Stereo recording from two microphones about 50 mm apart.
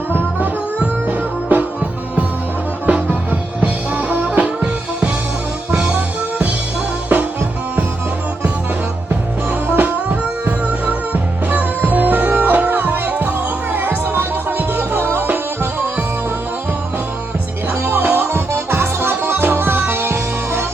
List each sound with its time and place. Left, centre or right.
0.1 s music: right
2.8 s music: right
7.1 s music: right
9.6 s music: right
17.8 s music: right